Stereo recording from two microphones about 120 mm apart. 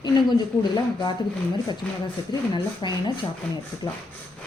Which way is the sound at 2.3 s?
40° left (ahead or behind).